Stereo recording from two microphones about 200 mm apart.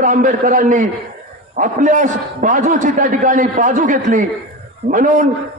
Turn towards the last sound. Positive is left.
turn(degrees=-40)  # may be behind; listen again after turning